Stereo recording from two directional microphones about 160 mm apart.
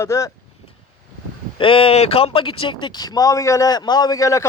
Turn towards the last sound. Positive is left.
turn(degrees=20)  # may be behind; listen again after turning